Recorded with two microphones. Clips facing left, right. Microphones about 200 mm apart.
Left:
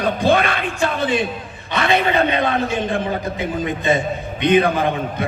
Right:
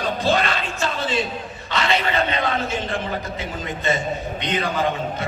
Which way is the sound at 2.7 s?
15° left (ahead or behind).